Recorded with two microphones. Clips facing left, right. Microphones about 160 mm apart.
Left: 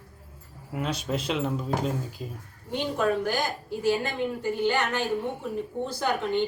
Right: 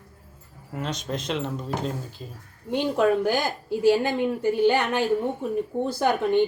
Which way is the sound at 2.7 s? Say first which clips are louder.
Right 5 dB; 65° right (ahead or behind).